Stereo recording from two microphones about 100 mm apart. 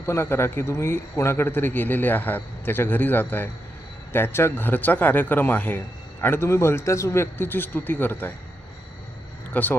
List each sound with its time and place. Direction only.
0.0 s a man's voice: 25° left (ahead or behind)
9.5 s speech: 15° left (ahead or behind)